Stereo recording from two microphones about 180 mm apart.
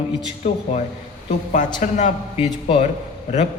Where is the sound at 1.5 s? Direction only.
45° left (ahead or behind).